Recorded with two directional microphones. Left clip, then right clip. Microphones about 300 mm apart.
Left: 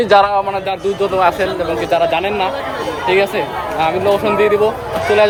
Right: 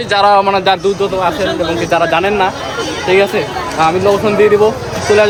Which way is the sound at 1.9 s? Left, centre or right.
Centre.